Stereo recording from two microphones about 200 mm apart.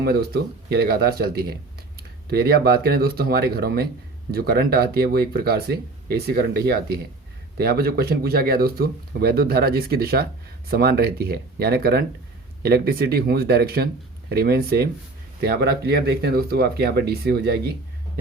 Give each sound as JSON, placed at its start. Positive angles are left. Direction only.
{"t": 0.0, "sound": "speech", "side_deg": -50}